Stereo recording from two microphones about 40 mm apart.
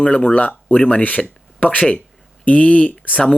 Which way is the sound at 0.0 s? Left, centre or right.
Left.